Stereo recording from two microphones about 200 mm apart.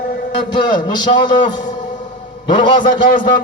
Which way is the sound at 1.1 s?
20° left (ahead or behind).